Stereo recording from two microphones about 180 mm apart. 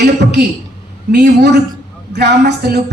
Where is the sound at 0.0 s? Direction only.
65° right (ahead or behind).